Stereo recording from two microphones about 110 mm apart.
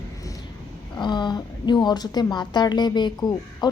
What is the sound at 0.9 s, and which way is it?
A woman's voice, 45° left (ahead or behind).